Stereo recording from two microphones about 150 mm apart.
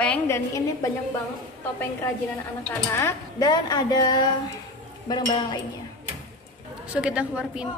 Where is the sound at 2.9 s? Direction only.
15° left (ahead or behind).